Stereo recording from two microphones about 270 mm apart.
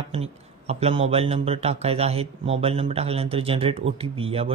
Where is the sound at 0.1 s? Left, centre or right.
Right.